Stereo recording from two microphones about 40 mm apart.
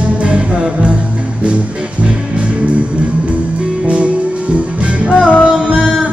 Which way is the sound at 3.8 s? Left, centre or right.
Right.